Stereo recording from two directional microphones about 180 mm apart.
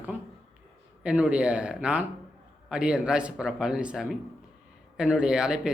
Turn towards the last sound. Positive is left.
turn(degrees=-5)  # may be behind; listen again after turning